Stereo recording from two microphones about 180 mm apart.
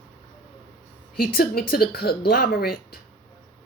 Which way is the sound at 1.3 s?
60° left (ahead or behind).